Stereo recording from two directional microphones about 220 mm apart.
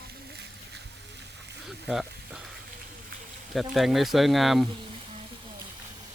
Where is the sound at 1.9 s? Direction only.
Centre (ahead or behind).